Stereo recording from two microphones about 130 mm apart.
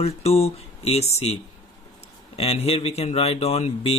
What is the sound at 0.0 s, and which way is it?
Speech, 50° left (ahead or behind).